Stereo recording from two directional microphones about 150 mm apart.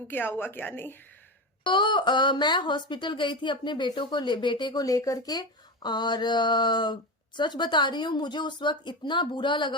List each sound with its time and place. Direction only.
0.1 s speech: 15° left (ahead or behind)
1.6 s a woman's voice: 30° left (ahead or behind)